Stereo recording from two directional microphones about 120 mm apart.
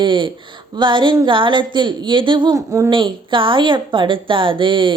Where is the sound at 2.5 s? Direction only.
25° right (ahead or behind).